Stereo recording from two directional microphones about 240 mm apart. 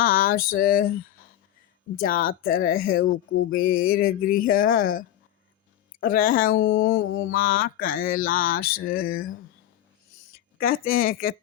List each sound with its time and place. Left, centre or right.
0.0 s a sound: left
2.0 s speech: left
7.1 s mantra: left
7.3 s speech: left
10.6 s speech: left